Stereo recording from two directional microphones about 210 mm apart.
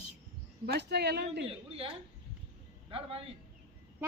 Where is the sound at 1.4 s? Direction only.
25° right (ahead or behind).